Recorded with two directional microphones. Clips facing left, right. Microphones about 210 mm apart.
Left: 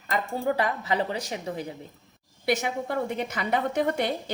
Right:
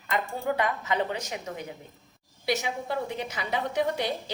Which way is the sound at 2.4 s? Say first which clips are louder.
Left 3 dB; 55° left (ahead or behind).